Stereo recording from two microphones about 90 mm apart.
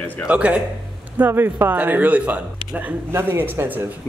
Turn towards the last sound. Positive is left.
turn(degrees=-25)  # may be behind; listen again after turning